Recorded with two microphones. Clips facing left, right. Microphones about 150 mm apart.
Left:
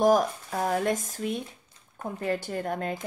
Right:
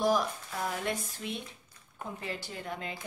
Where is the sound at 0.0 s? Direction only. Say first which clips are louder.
Left 7 dB; 45° left (ahead or behind).